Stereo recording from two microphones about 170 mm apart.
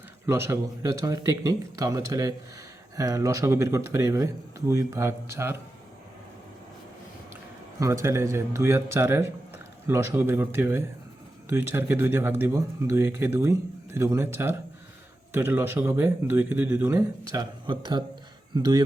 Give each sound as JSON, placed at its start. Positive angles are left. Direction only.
{"t": 0.3, "sound": "speech", "side_deg": -15}
{"t": 7.8, "sound": "speech", "side_deg": -20}
{"t": 17.7, "sound": "speech", "side_deg": -25}